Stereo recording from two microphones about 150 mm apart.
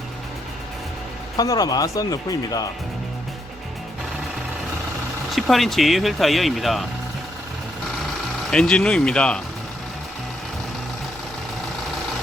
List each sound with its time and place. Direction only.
1.4 s speech: 25° left (ahead or behind)
5.3 s speech: centre (ahead or behind)
8.4 s speech: 5° left (ahead or behind)